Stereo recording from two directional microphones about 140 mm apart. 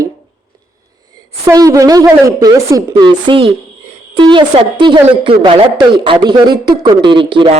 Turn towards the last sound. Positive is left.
turn(degrees=-35)  # may be behind; listen again after turning